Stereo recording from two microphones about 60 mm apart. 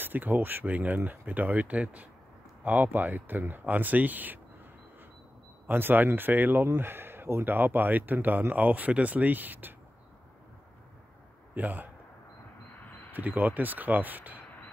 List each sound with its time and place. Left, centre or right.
0.0 s speech: right
5.7 s speech: right
11.5 s speech: right
12.7 s a sound: left
13.1 s speech: right